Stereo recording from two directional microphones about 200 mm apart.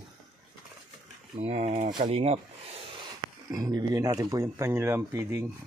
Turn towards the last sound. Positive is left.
turn(degrees=-15)  # may be behind; listen again after turning